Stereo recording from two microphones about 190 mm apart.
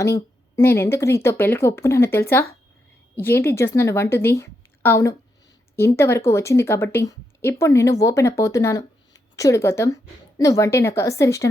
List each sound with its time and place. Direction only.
0.0 s a woman's voice: 15° left (ahead or behind)